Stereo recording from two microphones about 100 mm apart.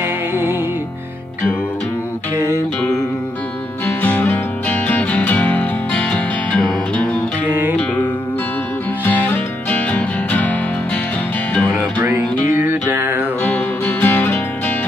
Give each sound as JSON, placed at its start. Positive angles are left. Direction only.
{"t": 0.0, "sound": "music", "side_deg": -20}
{"t": 4.0, "sound": "music", "side_deg": 15}
{"t": 7.4, "sound": "music", "side_deg": -20}
{"t": 9.0, "sound": "music", "side_deg": 15}
{"t": 12.5, "sound": "music", "side_deg": -20}
{"t": 13.4, "sound": "music", "side_deg": 15}